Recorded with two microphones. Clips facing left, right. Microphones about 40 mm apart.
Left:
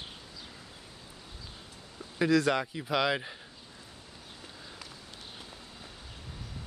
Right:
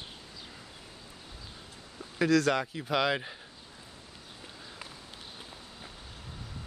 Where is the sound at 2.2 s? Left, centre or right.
Centre.